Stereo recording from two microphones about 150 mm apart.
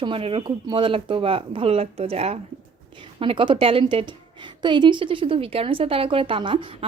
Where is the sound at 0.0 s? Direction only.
40° right (ahead or behind).